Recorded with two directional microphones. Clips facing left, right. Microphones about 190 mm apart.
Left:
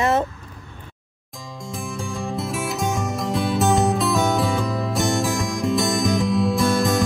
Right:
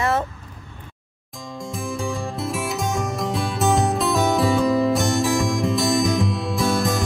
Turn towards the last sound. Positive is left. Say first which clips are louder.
# left 2 dB
turn(degrees=0)  # may be behind; listen again after turning